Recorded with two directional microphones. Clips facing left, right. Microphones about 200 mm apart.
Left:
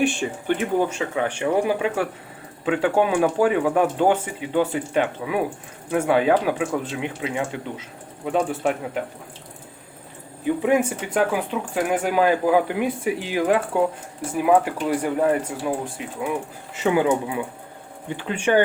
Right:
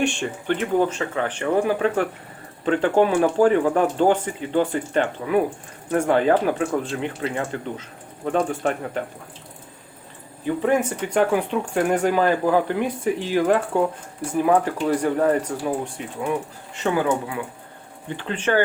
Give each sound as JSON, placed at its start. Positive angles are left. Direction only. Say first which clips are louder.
{"t": 0.0, "sound": "speech", "louder": "left 1 dB", "side_deg": 5}
{"t": 10.4, "sound": "speech", "louder": "left 1 dB", "side_deg": 10}
{"t": 16.7, "sound": "speech", "louder": "left 2 dB", "side_deg": 10}
{"t": 17.0, "sound": "speech", "louder": "left 2 dB", "side_deg": 20}